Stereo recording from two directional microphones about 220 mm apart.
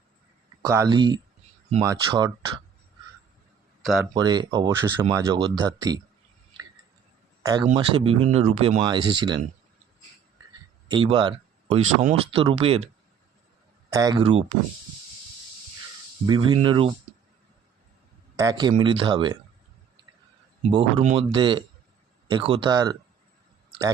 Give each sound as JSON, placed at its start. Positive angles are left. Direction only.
{"t": 0.7, "sound": "speech", "side_deg": -15}
{"t": 4.0, "sound": "speech", "side_deg": -20}
{"t": 7.4, "sound": "speech", "side_deg": -20}
{"t": 10.8, "sound": "speech", "side_deg": -20}
{"t": 13.9, "sound": "speech", "side_deg": -15}
{"t": 16.2, "sound": "speech", "side_deg": -20}
{"t": 18.3, "sound": "speech", "side_deg": -15}
{"t": 20.6, "sound": "speech", "side_deg": -25}